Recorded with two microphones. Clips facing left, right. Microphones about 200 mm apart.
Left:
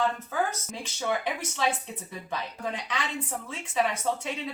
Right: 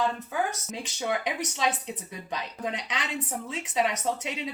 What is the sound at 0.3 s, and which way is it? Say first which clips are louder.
A woman's voice: even; 20° right (ahead or behind).